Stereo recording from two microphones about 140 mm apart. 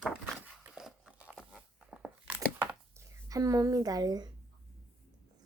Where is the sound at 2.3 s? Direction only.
10° right (ahead or behind).